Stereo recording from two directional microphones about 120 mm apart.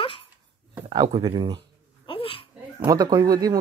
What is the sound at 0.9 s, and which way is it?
Speech, 35° right (ahead or behind).